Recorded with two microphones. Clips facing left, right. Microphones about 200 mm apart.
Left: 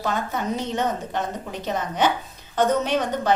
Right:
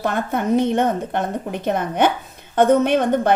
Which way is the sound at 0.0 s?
55° right (ahead or behind).